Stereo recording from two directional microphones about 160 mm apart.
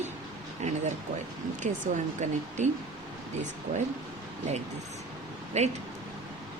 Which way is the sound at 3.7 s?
40° right (ahead or behind).